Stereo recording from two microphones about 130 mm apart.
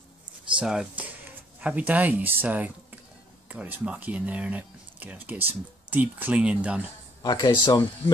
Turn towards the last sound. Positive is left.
turn(degrees=35)  # may be behind; listen again after turning